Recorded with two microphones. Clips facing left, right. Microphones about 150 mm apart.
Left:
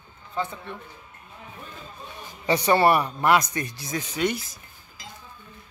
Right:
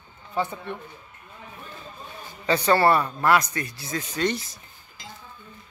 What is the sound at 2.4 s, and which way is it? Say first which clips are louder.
Speech: even; 15° left (ahead or behind).